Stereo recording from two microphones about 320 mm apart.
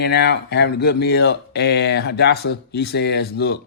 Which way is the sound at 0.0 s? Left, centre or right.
Left.